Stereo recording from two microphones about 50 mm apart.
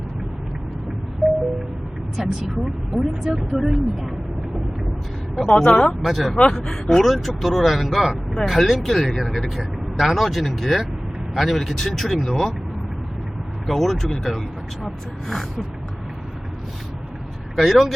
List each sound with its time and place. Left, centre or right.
1.2 s music: centre
2.1 s speech: centre
5.5 s speech: centre
6.0 s speech: centre
13.7 s speech: centre
17.6 s speech: centre